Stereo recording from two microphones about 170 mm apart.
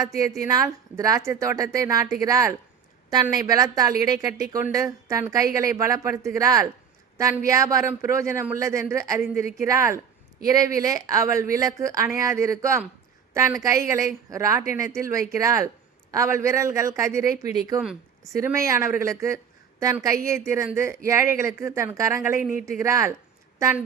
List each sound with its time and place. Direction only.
0.2 s a woman's voice: 20° right (ahead or behind)